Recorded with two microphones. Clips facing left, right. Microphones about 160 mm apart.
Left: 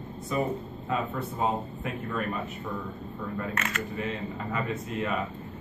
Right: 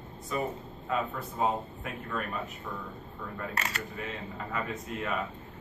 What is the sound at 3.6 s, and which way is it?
Speech, 35° right (ahead or behind).